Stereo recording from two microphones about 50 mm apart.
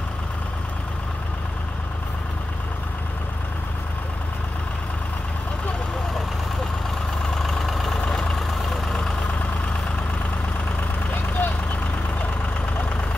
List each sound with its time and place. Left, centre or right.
7.3 s vehicle: centre
8.0 s vehicle: centre
8.3 s vehicle: centre
11.1 s vehicle: left